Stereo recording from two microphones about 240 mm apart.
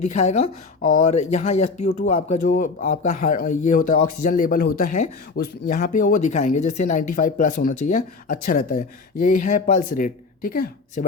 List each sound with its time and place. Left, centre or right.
0.1 s speech: left